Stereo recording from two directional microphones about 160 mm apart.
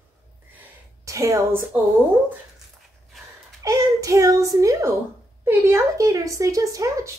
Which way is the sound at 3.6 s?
20° right (ahead or behind).